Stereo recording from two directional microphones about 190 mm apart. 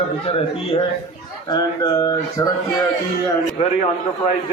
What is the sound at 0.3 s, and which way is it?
Speech, 30° left (ahead or behind).